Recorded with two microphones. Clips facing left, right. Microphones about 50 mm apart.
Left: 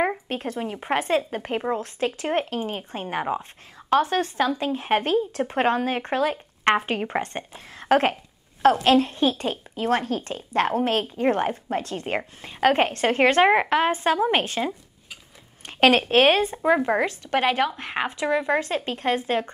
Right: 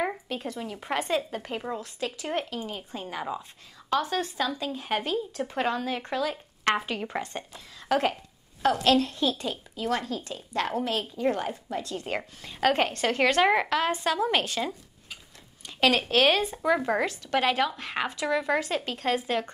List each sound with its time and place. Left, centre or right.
0.3 s speech: left
8.7 s speech: left
12.2 s speech: left
15.6 s speech: left
16.0 s speech: left